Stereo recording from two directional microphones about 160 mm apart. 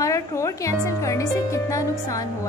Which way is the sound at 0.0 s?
20° left (ahead or behind).